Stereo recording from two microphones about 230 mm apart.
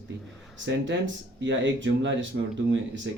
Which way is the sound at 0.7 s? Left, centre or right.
Right.